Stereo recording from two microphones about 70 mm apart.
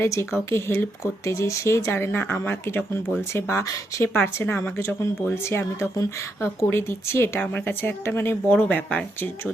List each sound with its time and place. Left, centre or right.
0.0 s a woman's voice: left
4.0 s a woman's voice: left
6.7 s speech: left
7.3 s speech: left
7.7 s speech: left
8.5 s speech: centre